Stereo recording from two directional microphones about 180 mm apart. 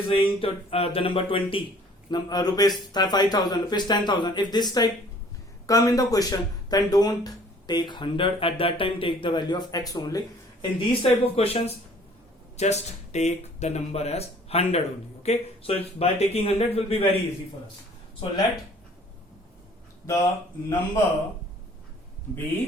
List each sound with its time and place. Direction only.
0.1 s speech: 30° left (ahead or behind)
10.6 s speech: 30° left (ahead or behind)
20.1 s speech: 15° left (ahead or behind)